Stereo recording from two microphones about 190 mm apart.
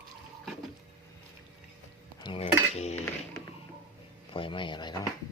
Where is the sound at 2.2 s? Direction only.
30° left (ahead or behind).